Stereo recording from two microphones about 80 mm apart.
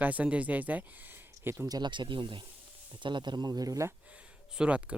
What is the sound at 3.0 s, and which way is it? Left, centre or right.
Speech, right.